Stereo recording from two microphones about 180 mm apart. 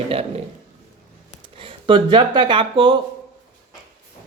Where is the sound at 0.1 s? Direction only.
30° right (ahead or behind).